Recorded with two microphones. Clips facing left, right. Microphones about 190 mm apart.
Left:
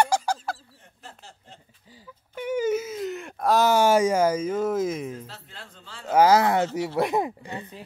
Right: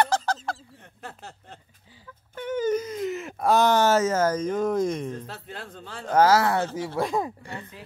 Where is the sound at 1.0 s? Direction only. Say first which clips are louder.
Right 5 dB; 60° right (ahead or behind).